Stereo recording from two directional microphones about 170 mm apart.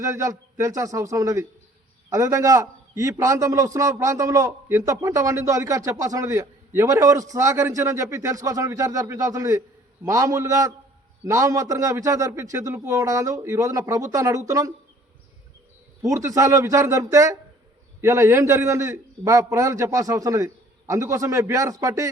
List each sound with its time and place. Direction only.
0.0 s a man's voice: 20° right (ahead or behind)
16.0 s a man's voice: 20° right (ahead or behind)